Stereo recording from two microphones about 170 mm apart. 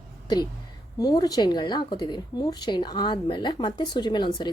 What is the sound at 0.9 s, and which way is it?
Speech, 25° left (ahead or behind).